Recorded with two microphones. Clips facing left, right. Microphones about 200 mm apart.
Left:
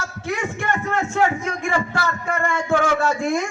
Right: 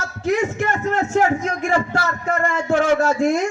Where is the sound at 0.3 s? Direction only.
40° right (ahead or behind).